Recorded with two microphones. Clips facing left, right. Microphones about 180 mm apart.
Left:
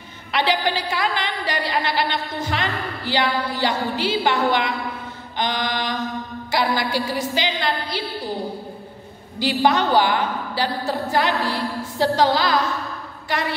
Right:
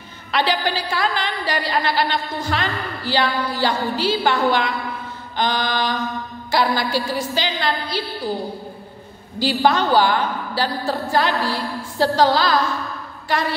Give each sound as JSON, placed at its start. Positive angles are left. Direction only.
{"t": 0.3, "sound": "a woman's voice", "side_deg": 20}
{"t": 9.4, "sound": "a woman's voice", "side_deg": 20}